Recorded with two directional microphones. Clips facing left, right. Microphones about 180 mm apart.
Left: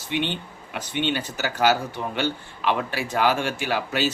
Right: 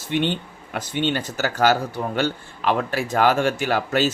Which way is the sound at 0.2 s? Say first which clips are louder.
Right 6 dB; 45° right (ahead or behind).